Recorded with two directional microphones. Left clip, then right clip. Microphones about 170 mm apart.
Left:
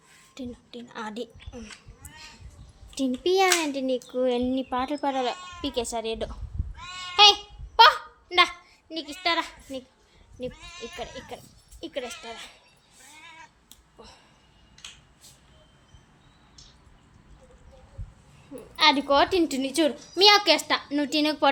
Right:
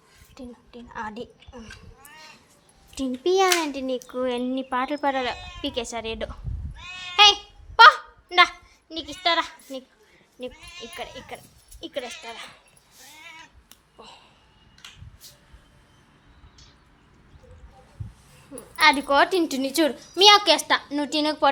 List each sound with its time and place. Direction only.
0.3 s a woman's voice: 25° left (ahead or behind)
2.9 s a child's voice: 10° left (ahead or behind)
6.9 s goat: 5° left (ahead or behind)
7.8 s a sound: 5° left (ahead or behind)
9.2 s a woman's voice: centre (ahead or behind)
10.5 s speech: 15° right (ahead or behind)
11.3 s a child's voice: 10° left (ahead or behind)
12.0 s speech: 30° right (ahead or behind)
12.3 s speech: centre (ahead or behind)
14.0 s a sound: 5° left (ahead or behind)
18.5 s speech: centre (ahead or behind)
20.9 s a child's voice: 10° left (ahead or behind)